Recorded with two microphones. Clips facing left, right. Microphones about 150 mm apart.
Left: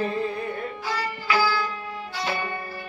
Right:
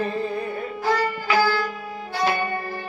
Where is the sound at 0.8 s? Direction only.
55° right (ahead or behind).